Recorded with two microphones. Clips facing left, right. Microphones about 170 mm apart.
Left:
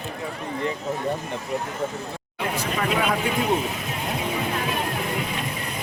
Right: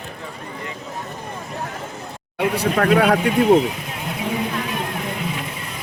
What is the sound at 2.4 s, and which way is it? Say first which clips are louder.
Speech: right 7 dB; 65° right (ahead or behind).